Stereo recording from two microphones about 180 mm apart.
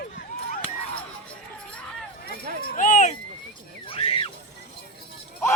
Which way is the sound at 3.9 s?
30° left (ahead or behind).